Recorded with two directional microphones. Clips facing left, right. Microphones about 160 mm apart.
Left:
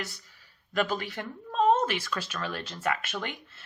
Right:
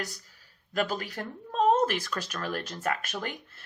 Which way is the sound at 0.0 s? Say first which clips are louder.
Right 1 dB; 40° right (ahead or behind).